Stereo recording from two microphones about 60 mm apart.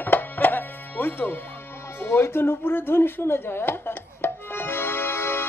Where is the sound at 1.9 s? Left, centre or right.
Left.